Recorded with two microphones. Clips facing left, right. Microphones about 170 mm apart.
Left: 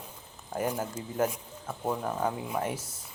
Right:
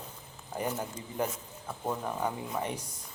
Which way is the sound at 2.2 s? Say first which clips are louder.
Left 2 dB; 5° left (ahead or behind).